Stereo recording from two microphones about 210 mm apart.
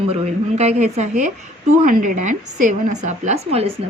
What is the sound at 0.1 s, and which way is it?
A woman's voice, 30° right (ahead or behind).